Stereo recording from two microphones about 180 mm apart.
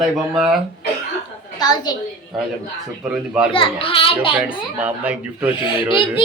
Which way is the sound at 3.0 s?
5° right (ahead or behind).